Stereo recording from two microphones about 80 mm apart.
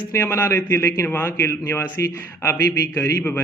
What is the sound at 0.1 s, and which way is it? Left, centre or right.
Speech, left.